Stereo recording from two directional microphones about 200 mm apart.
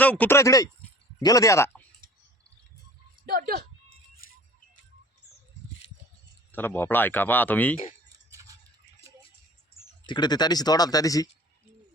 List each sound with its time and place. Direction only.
0.0 s speech: 5° left (ahead or behind)
3.2 s speech: 45° right (ahead or behind)
6.5 s speech: 10° left (ahead or behind)
8.3 s a sound: 15° right (ahead or behind)
10.1 s speech: 20° left (ahead or behind)